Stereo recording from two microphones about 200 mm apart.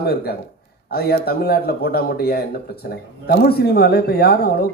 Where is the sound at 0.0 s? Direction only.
50° left (ahead or behind).